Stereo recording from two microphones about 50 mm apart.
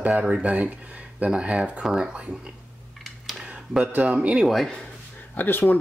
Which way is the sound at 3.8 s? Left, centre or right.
Right.